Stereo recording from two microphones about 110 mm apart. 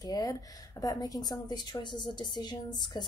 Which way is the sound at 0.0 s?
35° left (ahead or behind).